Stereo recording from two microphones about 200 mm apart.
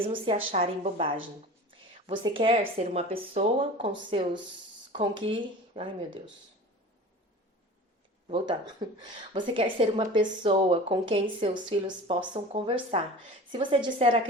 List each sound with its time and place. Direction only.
0.0 s a woman's voice: 25° right (ahead or behind)
8.3 s a woman's voice: 20° right (ahead or behind)